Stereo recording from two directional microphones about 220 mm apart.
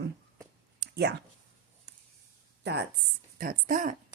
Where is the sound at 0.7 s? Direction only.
50° right (ahead or behind).